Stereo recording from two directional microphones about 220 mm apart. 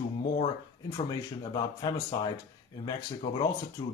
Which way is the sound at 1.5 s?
20° left (ahead or behind).